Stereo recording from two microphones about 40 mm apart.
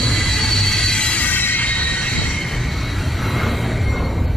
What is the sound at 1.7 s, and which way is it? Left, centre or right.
Train, left.